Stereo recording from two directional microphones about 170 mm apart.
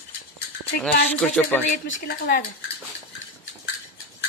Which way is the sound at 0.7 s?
60° left (ahead or behind).